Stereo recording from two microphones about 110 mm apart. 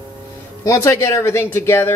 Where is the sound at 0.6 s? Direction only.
30° left (ahead or behind).